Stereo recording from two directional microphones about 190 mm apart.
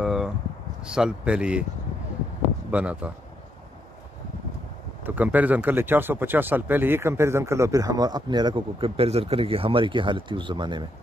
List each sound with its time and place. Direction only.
0.0 s a sound: centre (ahead or behind)
0.8 s speech: 5° right (ahead or behind)
2.7 s speech: 5° right (ahead or behind)
5.0 s speech: 10° right (ahead or behind); by 10.9 s 25° right (ahead or behind)